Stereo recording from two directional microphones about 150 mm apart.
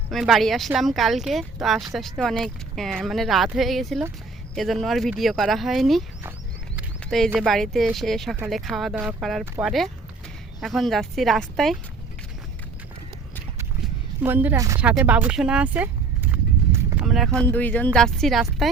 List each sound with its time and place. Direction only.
0.1 s speech: centre (ahead or behind)
7.3 s speech: centre (ahead or behind)
13.8 s a sound: 10° right (ahead or behind)
14.5 s speech: 25° right (ahead or behind)
14.8 s a sound: 10° right (ahead or behind)
17.1 s speech: centre (ahead or behind)
17.4 s speech: 10° left (ahead or behind)